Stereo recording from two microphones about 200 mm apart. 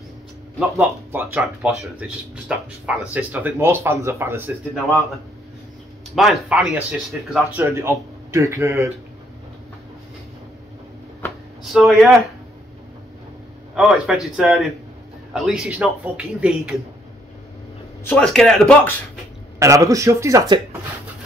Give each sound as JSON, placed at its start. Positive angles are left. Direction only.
{"t": 0.6, "sound": "speech", "side_deg": -5}
{"t": 6.1, "sound": "a man's voice", "side_deg": 0}
{"t": 7.3, "sound": "speech", "side_deg": -10}
{"t": 11.2, "sound": "a sound", "side_deg": 10}
{"t": 11.6, "sound": "speech", "side_deg": 0}
{"t": 13.7, "sound": "a man's voice", "side_deg": 0}
{"t": 18.0, "sound": "a man's voice", "side_deg": 5}
{"t": 19.6, "sound": "speech", "side_deg": -15}